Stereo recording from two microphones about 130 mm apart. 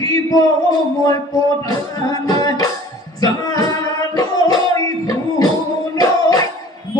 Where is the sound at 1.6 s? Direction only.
30° left (ahead or behind).